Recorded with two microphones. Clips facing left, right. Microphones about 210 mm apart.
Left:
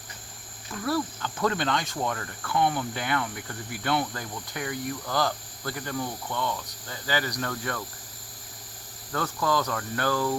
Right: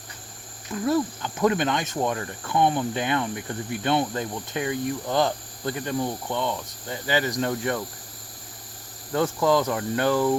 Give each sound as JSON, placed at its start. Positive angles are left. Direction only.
{"t": 0.9, "sound": "speech", "side_deg": -20}
{"t": 9.1, "sound": "speech", "side_deg": -20}